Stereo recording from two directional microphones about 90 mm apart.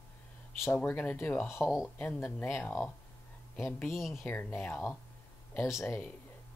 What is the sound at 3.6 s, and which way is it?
Speech, 25° left (ahead or behind).